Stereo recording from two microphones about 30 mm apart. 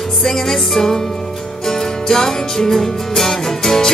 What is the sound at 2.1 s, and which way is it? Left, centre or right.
Music, centre.